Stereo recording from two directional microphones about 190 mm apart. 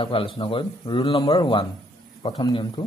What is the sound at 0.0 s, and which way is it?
Speech, 25° left (ahead or behind).